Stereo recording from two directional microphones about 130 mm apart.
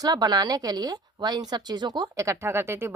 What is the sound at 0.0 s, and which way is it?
Speech, 30° right (ahead or behind).